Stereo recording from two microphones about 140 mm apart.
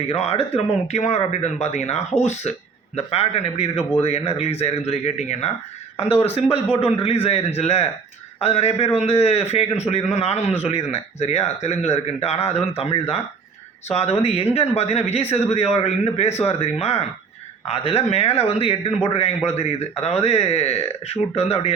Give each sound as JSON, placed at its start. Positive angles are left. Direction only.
{"t": 0.1, "sound": "speech", "side_deg": 45}